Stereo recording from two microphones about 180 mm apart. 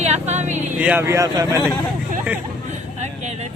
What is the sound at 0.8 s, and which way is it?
Speech, 10° right (ahead or behind).